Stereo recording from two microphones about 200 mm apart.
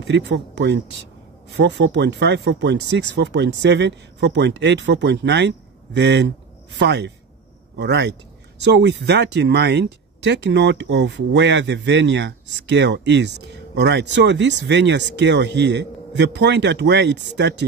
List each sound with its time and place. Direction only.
0.0 s speech: 60° right (ahead or behind)